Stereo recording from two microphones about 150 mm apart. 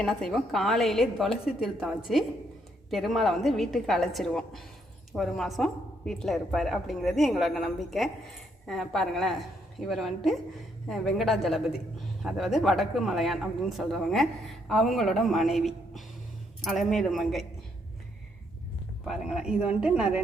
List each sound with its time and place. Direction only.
0.0 s speech: 5° left (ahead or behind)
19.0 s speech: 5° right (ahead or behind)